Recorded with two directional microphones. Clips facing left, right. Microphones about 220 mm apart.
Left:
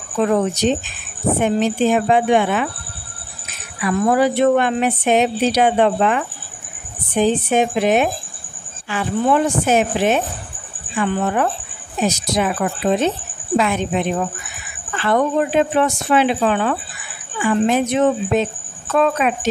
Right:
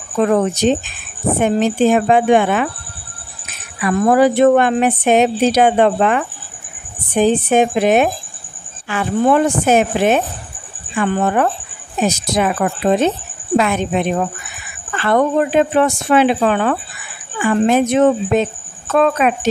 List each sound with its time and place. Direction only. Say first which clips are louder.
0.2 s a woman's voice: right 3 dB; 50° right (ahead or behind)
3.8 s a woman's voice: right 3 dB; 50° right (ahead or behind)